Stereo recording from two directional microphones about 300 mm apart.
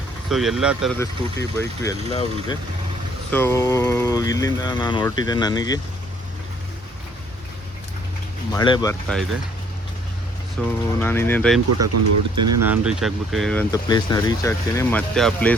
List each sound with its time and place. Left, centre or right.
0.3 s speech: centre
0.9 s speech: centre
8.5 s speech: centre
10.6 s speech: centre
11.9 s speech: right
12.6 s speech: centre